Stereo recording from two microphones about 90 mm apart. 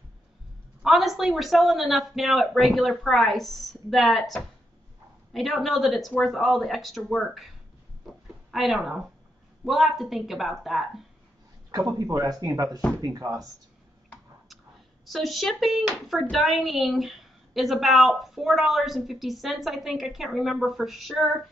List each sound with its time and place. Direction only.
0.8 s speech: centre (ahead or behind)
8.0 s a sound: centre (ahead or behind)
8.5 s speech: centre (ahead or behind)
12.0 s speech: 45° right (ahead or behind)
15.0 s speech: centre (ahead or behind)